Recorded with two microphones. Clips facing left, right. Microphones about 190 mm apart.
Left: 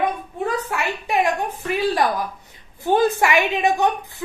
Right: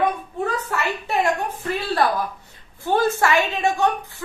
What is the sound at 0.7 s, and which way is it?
A woman's voice, 15° left (ahead or behind).